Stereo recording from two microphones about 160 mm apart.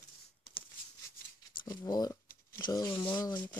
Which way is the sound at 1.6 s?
25° left (ahead or behind).